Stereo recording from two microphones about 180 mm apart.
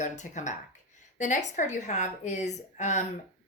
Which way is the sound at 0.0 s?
40° left (ahead or behind).